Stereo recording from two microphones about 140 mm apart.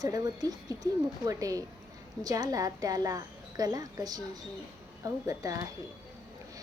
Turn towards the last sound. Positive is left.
turn(degrees=-25)  # may be behind; listen again after turning